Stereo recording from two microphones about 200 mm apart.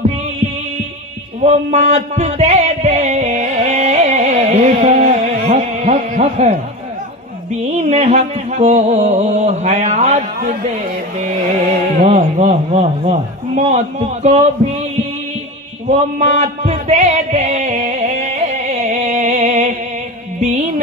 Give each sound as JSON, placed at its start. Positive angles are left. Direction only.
{"t": 1.4, "sound": "music", "side_deg": -35}
{"t": 7.7, "sound": "music", "side_deg": -35}
{"t": 12.1, "sound": "music", "side_deg": -35}
{"t": 15.9, "sound": "music", "side_deg": -35}